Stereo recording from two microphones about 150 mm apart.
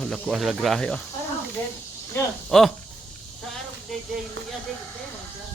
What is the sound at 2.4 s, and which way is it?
Speech, centre (ahead or behind).